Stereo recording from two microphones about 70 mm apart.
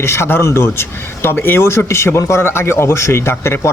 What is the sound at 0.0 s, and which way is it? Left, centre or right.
Speech, left.